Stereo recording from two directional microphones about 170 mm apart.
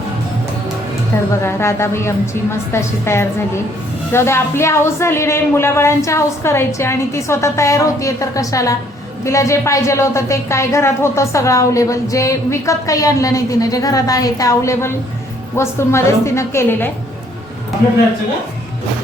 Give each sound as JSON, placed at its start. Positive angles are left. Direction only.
{"t": 1.3, "sound": "a woman's voice", "side_deg": 15}